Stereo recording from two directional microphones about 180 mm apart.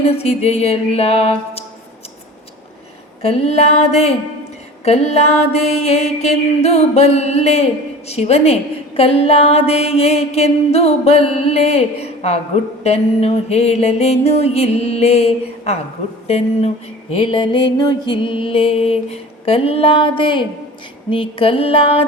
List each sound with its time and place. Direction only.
0.0 s mantra: 35° left (ahead or behind)
3.2 s mantra: 35° left (ahead or behind)